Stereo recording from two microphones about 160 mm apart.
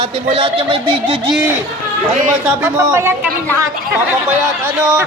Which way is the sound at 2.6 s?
15° right (ahead or behind).